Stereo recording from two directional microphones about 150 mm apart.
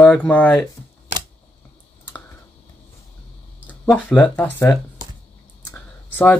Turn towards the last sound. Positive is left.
turn(degrees=15)  # may be behind; listen again after turning